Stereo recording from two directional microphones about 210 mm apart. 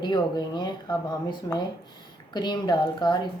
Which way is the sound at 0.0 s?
20° left (ahead or behind).